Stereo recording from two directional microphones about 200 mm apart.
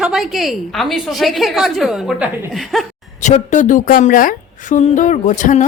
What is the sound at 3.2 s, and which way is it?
A woman's voice, 35° left (ahead or behind).